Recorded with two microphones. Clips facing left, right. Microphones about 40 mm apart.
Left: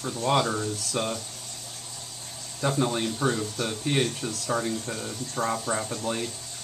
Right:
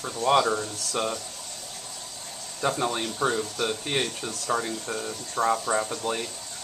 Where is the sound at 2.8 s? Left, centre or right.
Right.